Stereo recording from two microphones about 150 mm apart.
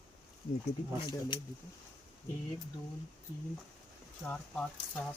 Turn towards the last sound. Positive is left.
turn(degrees=10)  # may be behind; listen again after turning